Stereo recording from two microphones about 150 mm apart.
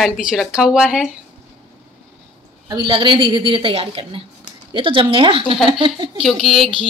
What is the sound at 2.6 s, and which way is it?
A woman's voice, 30° right (ahead or behind).